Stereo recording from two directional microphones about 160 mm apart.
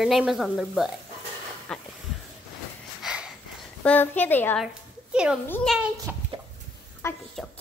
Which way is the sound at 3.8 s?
10° left (ahead or behind).